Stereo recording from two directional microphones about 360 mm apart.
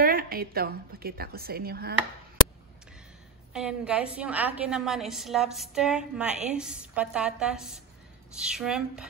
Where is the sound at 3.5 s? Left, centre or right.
Centre.